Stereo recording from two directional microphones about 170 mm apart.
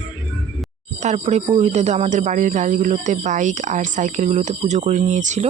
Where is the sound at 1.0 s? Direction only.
45° right (ahead or behind).